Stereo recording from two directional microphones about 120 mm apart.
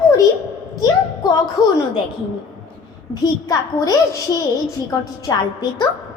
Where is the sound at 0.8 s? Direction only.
35° left (ahead or behind).